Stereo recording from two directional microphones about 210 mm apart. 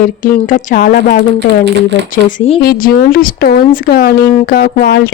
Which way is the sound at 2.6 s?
45° left (ahead or behind).